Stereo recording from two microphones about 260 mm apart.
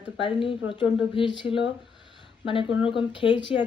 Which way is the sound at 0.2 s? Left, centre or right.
Centre.